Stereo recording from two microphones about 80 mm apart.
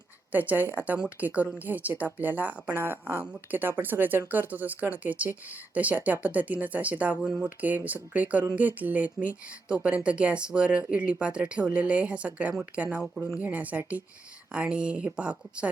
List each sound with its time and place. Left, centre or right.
0.3 s a woman's voice: right